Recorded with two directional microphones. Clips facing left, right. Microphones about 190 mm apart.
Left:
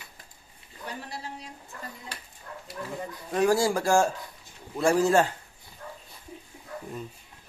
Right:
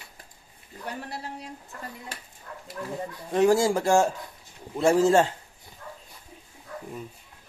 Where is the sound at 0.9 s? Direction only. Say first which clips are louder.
Right 3 dB; 60° right (ahead or behind).